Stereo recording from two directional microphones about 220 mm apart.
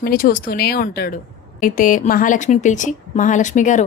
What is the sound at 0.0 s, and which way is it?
A woman's voice, 40° left (ahead or behind).